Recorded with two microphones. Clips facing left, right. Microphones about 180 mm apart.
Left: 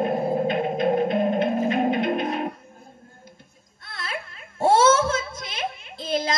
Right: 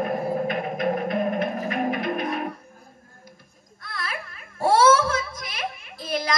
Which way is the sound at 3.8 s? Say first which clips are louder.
Even; 25° left (ahead or behind).